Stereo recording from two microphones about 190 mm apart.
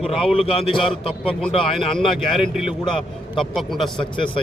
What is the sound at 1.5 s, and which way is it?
Speech, 25° left (ahead or behind).